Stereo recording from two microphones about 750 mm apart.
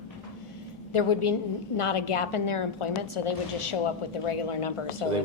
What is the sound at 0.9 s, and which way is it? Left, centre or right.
A woman's voice, left.